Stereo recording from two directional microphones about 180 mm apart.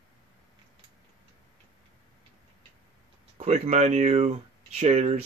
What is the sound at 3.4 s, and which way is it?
Speech, 35° right (ahead or behind).